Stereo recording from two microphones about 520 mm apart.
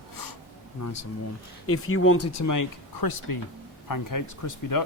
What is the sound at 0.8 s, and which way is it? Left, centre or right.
Speech, left.